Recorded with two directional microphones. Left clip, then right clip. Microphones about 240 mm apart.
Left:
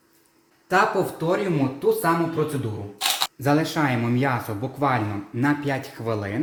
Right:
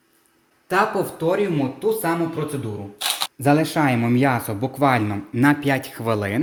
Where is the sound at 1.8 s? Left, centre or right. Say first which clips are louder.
Left 1 dB; right.